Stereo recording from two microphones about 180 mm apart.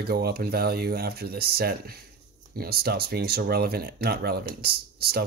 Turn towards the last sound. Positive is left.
turn(degrees=-60)  # may be behind; listen again after turning